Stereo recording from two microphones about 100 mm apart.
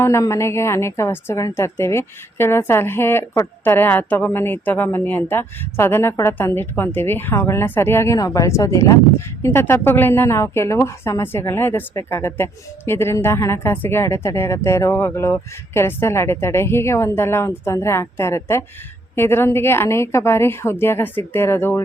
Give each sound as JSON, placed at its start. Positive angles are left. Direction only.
{"t": 0.0, "sound": "a woman's voice", "side_deg": 25}